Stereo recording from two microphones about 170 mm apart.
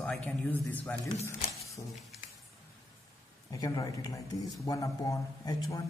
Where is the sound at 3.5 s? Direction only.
20° left (ahead or behind).